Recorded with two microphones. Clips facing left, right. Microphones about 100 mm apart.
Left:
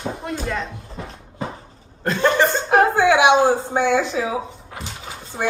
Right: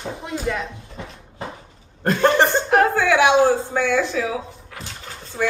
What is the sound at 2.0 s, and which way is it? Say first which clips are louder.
Cough: right 1 dB; 45° right (ahead or behind).